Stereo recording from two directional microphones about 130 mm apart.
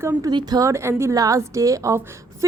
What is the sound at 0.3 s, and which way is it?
Speech, 30° right (ahead or behind).